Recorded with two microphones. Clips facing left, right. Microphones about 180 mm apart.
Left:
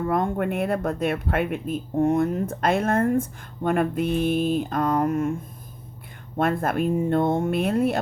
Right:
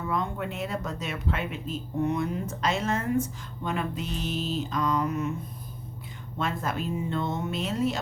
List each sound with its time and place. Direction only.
0.0 s speech: 50° left (ahead or behind)
6.3 s speech: 55° left (ahead or behind)